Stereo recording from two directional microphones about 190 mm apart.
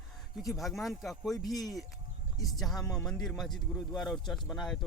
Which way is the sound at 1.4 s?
20° left (ahead or behind).